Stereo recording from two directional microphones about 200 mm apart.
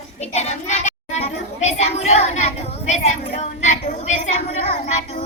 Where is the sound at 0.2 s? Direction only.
35° left (ahead or behind).